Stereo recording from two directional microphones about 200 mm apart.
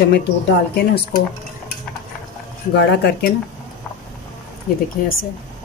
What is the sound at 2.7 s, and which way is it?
Speech, 55° left (ahead or behind).